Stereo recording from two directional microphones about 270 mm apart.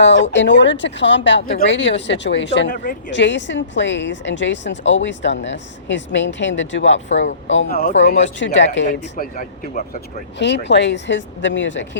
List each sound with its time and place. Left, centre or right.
0.0 s speech: left
8.4 s speech: left
8.9 s speech: left